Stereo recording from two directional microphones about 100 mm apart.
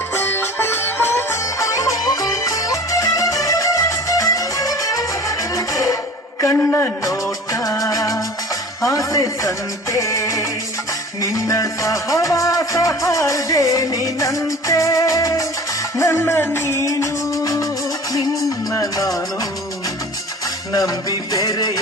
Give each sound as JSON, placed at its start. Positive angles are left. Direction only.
{"t": 0.2, "sound": "music", "side_deg": 20}
{"t": 6.4, "sound": "a man's voice", "side_deg": 20}
{"t": 7.8, "sound": "music", "side_deg": 35}
{"t": 18.7, "sound": "music", "side_deg": 35}
{"t": 20.7, "sound": "music", "side_deg": 35}